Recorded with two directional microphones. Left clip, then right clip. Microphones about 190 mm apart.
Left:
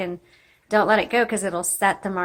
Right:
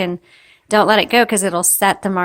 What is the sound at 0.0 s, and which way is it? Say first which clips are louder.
A woman's voice: right 7 dB; 50° right (ahead or behind).